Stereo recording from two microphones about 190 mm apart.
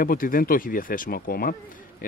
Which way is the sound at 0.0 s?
50° left (ahead or behind).